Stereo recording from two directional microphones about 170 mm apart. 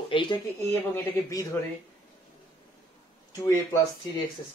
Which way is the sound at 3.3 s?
20° left (ahead or behind).